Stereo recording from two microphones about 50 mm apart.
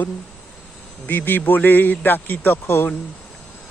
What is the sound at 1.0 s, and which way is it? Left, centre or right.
A man's voice, left.